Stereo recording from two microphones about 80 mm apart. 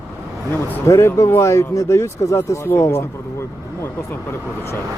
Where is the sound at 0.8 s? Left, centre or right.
Left.